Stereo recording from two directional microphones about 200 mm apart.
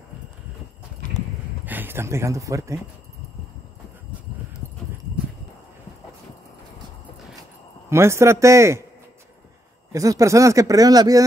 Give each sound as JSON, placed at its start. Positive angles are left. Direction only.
{"t": 1.7, "sound": "speech", "side_deg": -10}
{"t": 7.9, "sound": "speech", "side_deg": -15}
{"t": 9.9, "sound": "speech", "side_deg": -15}